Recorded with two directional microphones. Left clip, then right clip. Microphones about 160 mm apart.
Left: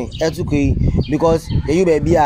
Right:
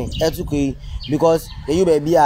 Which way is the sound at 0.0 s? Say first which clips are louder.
Left 1 dB; 10° left (ahead or behind).